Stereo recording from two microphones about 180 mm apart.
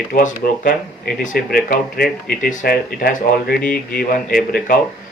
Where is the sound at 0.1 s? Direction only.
50° left (ahead or behind).